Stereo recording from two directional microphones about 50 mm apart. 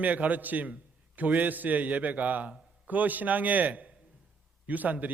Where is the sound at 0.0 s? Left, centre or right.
Right.